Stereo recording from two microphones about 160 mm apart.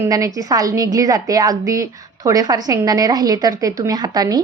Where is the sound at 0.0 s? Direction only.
20° right (ahead or behind).